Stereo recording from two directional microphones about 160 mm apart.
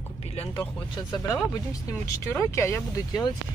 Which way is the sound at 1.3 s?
20° left (ahead or behind).